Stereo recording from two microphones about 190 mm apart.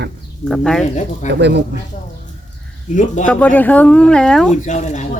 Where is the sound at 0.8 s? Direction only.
40° left (ahead or behind).